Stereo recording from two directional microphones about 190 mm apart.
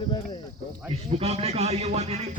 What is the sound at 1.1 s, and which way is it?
A man's voice, 35° right (ahead or behind).